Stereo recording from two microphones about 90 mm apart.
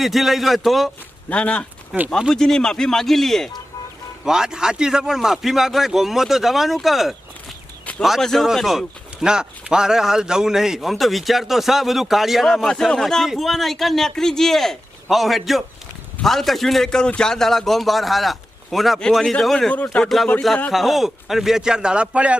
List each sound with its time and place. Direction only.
0.0 s a man's voice: centre (ahead or behind)
1.3 s speech: 15° left (ahead or behind)
1.9 s a man's voice: 5° right (ahead or behind)
2.3 s a man's voice: 5° left (ahead or behind)
4.3 s a man's voice: 5° right (ahead or behind)
19.7 s speech: 15° left (ahead or behind)
20.7 s a man's voice: centre (ahead or behind)